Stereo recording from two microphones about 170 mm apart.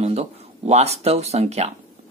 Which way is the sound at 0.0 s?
40° right (ahead or behind).